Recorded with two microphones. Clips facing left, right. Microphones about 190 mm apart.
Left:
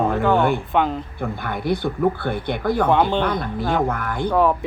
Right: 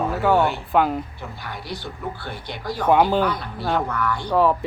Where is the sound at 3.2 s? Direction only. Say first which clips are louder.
Left 2 dB; 50° left (ahead or behind).